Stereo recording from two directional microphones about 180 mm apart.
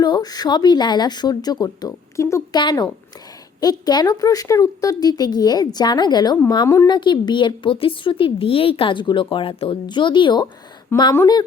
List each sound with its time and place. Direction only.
0.0 s a woman's voice: 20° left (ahead or behind)